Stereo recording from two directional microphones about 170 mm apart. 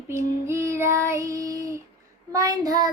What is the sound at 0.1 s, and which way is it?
Child singing, 15° right (ahead or behind).